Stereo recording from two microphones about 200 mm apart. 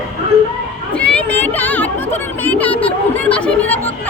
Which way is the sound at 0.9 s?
5° left (ahead or behind).